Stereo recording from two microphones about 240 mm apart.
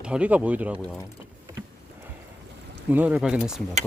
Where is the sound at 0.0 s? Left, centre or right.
Centre.